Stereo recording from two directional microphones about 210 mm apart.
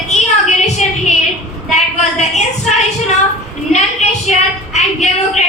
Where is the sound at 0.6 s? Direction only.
30° left (ahead or behind).